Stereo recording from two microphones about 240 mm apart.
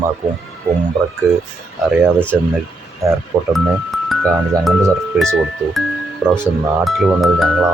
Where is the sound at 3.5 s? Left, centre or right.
Centre.